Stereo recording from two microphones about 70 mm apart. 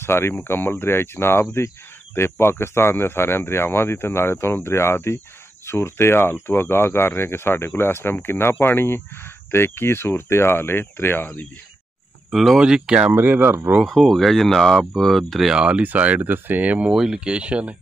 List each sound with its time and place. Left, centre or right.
0.0 s speech: left
12.3 s speech: centre
13.1 s speech: right
13.8 s speech: centre
15.5 s speech: centre
16.9 s speech: centre